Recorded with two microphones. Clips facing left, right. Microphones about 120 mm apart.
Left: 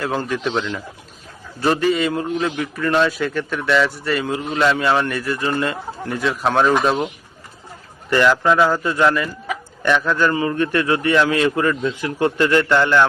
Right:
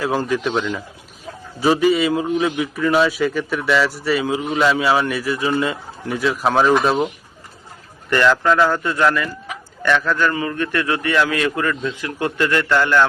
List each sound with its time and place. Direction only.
0.0 s a man's voice: 5° right (ahead or behind)
8.1 s a man's voice: 15° left (ahead or behind)